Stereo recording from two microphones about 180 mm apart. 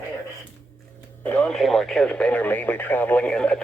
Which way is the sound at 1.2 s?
10° left (ahead or behind).